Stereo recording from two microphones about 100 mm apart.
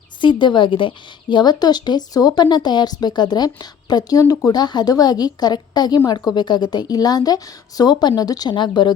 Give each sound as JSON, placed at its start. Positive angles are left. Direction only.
{"t": 0.2, "sound": "a woman's voice", "side_deg": 50}